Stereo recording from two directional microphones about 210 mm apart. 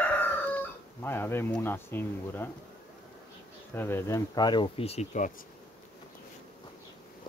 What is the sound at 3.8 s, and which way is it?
Speech, 10° left (ahead or behind).